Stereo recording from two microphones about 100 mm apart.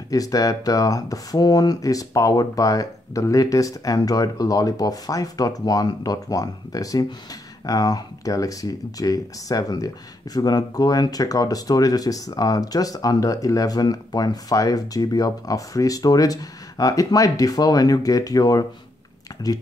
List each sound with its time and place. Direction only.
0.1 s speech: 35° left (ahead or behind)